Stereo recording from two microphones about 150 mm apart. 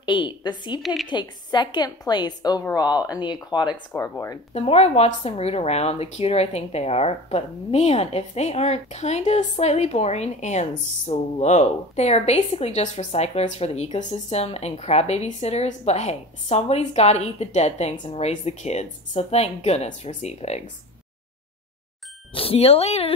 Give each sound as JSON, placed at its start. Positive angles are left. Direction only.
{"t": 0.0, "sound": "a woman's voice", "side_deg": 30}
{"t": 3.9, "sound": "a woman's voice", "side_deg": 20}
{"t": 4.6, "sound": "speech", "side_deg": 45}
{"t": 22.3, "sound": "speech", "side_deg": 40}